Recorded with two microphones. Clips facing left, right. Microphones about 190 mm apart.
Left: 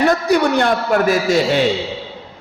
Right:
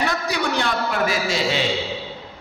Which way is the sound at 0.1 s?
50° left (ahead or behind).